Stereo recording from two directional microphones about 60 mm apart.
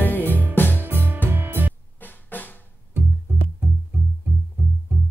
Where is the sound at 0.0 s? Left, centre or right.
Left.